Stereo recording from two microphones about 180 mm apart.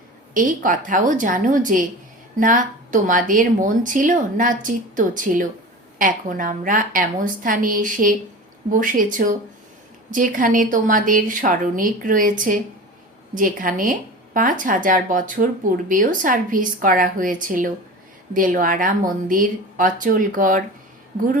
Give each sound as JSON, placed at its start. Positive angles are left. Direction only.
{"t": 0.3, "sound": "speech", "side_deg": -50}
{"t": 18.3, "sound": "speech", "side_deg": -50}